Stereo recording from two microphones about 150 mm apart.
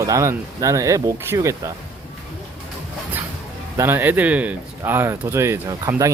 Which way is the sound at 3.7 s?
15° right (ahead or behind).